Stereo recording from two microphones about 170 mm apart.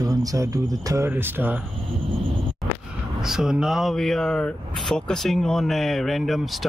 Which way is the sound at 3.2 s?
5° right (ahead or behind).